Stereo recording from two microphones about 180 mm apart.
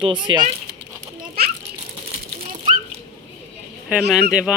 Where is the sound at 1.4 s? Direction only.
60° right (ahead or behind).